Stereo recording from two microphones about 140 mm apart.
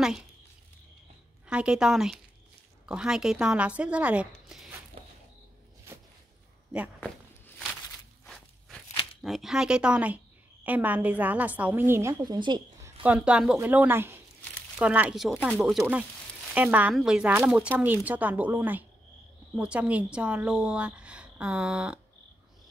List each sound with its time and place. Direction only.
1.5 s a woman's voice: 5° right (ahead or behind)
7.0 s walk: 5° left (ahead or behind)
9.2 s a woman's voice: centre (ahead or behind); by 12.2 s 20° right (ahead or behind)
12.2 s speech: 30° right (ahead or behind)
13.0 s a woman's voice: 10° right (ahead or behind)